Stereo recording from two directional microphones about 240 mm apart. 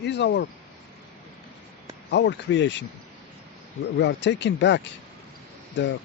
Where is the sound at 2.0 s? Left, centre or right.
Left.